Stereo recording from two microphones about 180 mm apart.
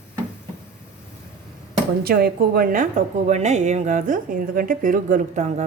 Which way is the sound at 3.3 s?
40° right (ahead or behind).